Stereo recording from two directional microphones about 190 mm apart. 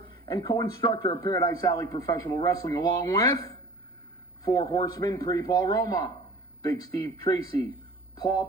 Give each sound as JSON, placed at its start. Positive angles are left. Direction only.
{"t": 0.3, "sound": "a man's voice", "side_deg": 20}
{"t": 4.4, "sound": "a man's voice", "side_deg": 20}
{"t": 8.1, "sound": "speech", "side_deg": 20}